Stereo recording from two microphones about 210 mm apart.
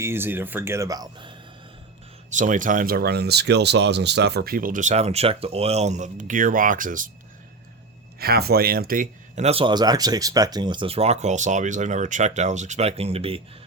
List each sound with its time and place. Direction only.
0.0 s speech: 10° right (ahead or behind)
2.3 s speech: 35° right (ahead or behind)
8.2 s speech: 50° right (ahead or behind); by 13.4 s 25° right (ahead or behind)